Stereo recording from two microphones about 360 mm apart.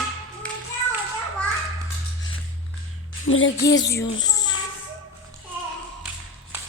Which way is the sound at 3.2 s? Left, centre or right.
Left.